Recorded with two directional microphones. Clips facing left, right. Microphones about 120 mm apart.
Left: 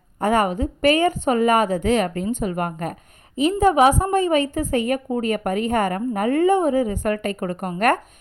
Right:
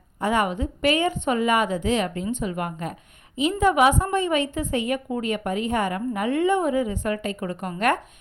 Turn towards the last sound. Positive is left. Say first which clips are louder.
# left 3 dB
turn(degrees=45)  # may be behind; listen again after turning